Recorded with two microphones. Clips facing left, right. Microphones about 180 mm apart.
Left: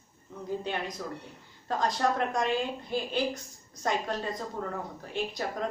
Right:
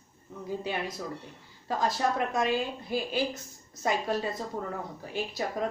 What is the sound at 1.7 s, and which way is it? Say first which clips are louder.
A woman's voice: even; 5° right (ahead or behind).